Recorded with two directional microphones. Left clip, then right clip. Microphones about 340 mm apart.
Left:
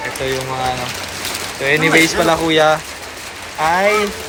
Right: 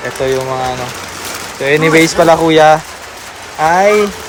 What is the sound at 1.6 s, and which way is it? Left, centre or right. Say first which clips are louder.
Speech: right 3 dB; centre.